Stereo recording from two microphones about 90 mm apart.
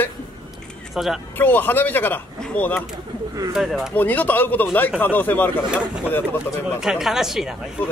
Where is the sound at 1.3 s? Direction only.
20° left (ahead or behind).